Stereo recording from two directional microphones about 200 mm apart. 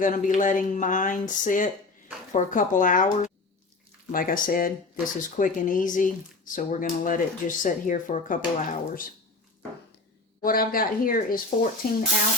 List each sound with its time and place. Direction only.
0.0 s speech: 40° left (ahead or behind)
10.4 s speech: 45° left (ahead or behind)